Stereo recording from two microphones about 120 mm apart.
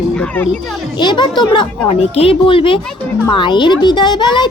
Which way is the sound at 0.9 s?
40° left (ahead or behind).